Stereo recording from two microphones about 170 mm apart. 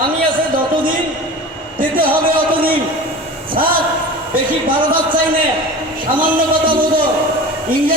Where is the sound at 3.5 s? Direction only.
60° right (ahead or behind).